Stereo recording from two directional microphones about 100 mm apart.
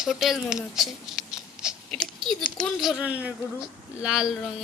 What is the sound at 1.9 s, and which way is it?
Speech, 5° left (ahead or behind).